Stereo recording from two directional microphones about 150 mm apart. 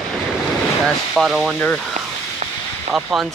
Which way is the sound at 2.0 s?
60° right (ahead or behind).